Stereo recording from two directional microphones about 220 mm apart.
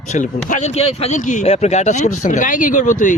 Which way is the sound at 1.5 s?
30° left (ahead or behind).